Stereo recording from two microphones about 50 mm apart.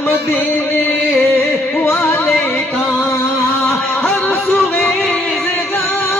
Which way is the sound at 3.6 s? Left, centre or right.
Left.